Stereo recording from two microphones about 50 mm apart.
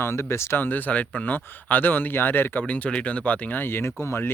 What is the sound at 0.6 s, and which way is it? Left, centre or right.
Speech, left.